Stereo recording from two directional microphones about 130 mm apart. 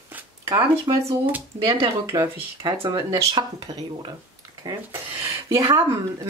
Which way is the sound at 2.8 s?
40° right (ahead or behind).